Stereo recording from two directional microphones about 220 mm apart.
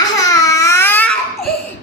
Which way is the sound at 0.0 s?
15° left (ahead or behind).